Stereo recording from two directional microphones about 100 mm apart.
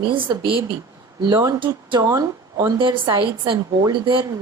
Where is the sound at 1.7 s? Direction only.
45° right (ahead or behind).